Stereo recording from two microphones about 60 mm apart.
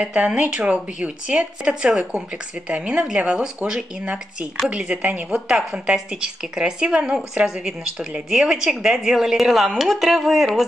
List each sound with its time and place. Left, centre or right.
0.0 s a woman's voice: right
5.6 s speech: centre